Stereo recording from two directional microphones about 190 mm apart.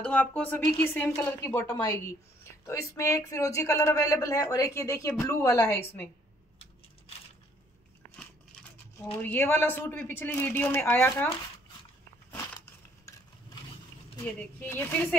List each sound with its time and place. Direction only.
0.0 s speech: 10° left (ahead or behind)
9.2 s speech: 10° left (ahead or behind)
14.1 s speech: 10° left (ahead or behind)